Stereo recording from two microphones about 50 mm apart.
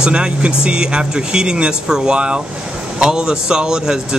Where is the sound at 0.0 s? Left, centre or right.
Centre.